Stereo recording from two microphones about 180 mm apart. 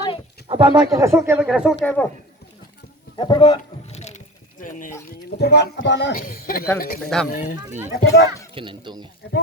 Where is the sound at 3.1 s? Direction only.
25° left (ahead or behind); by 4.9 s 45° left (ahead or behind).